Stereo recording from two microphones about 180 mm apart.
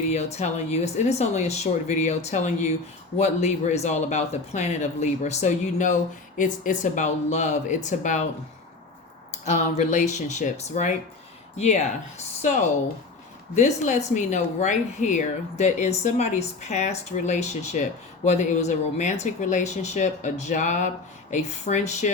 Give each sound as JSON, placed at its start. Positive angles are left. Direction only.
{"t": 0.1, "sound": "speech", "side_deg": 35}
{"t": 9.5, "sound": "speech", "side_deg": 40}
{"t": 13.6, "sound": "speech", "side_deg": 45}